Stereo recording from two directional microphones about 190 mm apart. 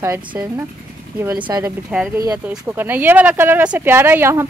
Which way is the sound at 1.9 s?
5° right (ahead or behind).